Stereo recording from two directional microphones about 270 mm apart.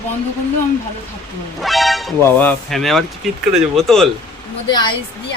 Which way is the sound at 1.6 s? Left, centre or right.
Centre.